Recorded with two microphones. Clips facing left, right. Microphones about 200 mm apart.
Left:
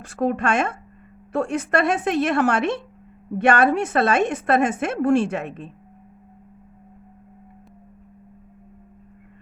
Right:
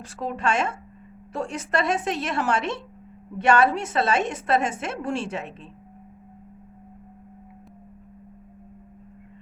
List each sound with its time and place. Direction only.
0.0 s a woman's voice: 55° left (ahead or behind)